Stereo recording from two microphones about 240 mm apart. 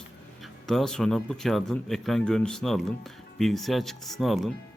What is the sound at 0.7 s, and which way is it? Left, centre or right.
Speech, centre.